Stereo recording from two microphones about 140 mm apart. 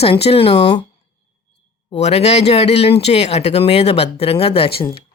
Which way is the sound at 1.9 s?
50° left (ahead or behind).